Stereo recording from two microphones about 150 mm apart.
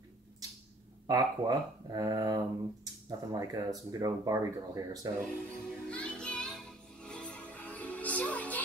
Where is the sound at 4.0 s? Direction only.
25° right (ahead or behind).